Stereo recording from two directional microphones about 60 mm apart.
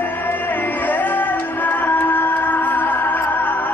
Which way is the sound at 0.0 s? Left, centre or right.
Left.